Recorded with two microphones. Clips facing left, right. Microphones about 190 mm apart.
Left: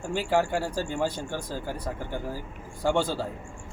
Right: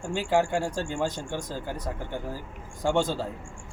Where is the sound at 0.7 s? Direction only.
5° left (ahead or behind).